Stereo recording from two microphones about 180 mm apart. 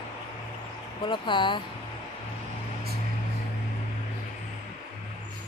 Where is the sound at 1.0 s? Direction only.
25° left (ahead or behind).